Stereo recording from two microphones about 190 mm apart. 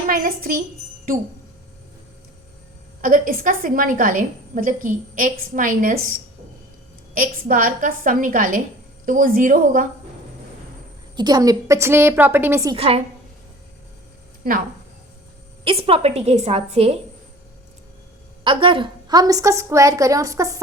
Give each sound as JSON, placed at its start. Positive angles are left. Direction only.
{"t": 0.1, "sound": "a woman's voice", "side_deg": -50}
{"t": 3.0, "sound": "a woman's voice", "side_deg": -45}
{"t": 11.2, "sound": "a woman's voice", "side_deg": -20}
{"t": 12.7, "sound": "a woman's voice", "side_deg": -30}
{"t": 15.6, "sound": "a woman's voice", "side_deg": -30}
{"t": 18.4, "sound": "a woman's voice", "side_deg": -25}